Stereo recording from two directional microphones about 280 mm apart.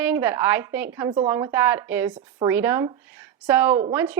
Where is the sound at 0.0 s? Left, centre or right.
Centre.